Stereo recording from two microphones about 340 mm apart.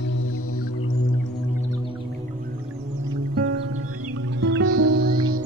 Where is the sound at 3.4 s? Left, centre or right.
Right.